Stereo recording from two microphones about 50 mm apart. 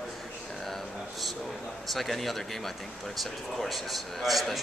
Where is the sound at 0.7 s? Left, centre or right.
Centre.